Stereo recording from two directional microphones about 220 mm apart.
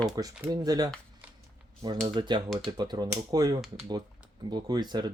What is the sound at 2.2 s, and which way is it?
Speech, 20° right (ahead or behind).